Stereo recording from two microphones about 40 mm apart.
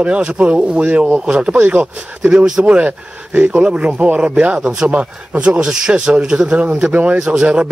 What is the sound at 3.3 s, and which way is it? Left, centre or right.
Speech, right.